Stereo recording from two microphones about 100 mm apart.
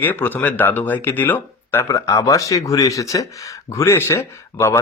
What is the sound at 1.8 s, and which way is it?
Speech, 35° left (ahead or behind).